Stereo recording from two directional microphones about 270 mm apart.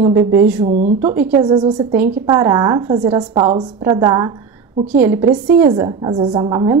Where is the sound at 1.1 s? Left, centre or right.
Centre.